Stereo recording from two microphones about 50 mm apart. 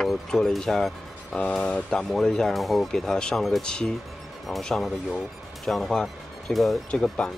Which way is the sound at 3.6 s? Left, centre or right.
Centre.